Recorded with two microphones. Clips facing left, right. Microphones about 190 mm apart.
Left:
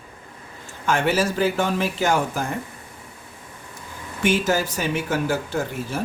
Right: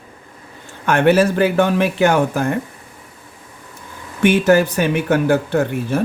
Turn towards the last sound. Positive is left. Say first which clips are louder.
# right 8 dB
turn(degrees=-60)  # may be behind; listen again after turning